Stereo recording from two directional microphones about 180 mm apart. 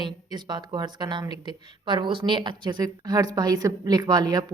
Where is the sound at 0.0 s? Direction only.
25° right (ahead or behind).